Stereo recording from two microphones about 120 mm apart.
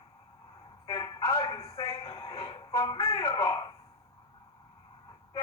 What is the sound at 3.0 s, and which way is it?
Music, 30° left (ahead or behind).